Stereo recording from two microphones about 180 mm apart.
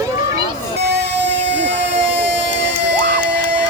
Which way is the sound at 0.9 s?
75° right (ahead or behind).